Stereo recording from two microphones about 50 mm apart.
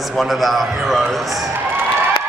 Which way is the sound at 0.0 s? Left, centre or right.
Centre.